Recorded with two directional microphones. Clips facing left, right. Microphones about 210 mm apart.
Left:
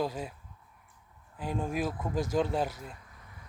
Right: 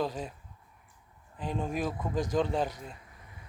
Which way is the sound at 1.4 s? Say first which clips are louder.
Even; 10° left (ahead or behind).